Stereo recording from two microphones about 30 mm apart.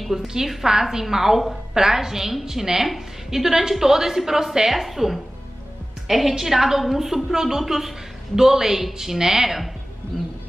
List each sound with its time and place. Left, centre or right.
0.1 s a woman's voice: centre